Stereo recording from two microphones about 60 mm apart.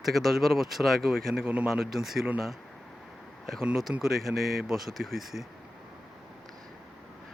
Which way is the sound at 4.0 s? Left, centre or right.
Centre.